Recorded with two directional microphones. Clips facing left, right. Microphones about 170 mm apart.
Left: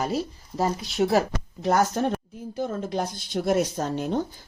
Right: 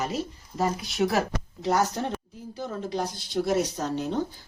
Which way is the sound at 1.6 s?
55° left (ahead or behind).